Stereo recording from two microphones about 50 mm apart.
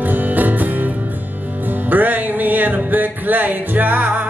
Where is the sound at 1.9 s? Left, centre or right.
Right.